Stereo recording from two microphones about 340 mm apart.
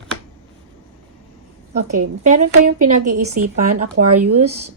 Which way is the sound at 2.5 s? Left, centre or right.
Right.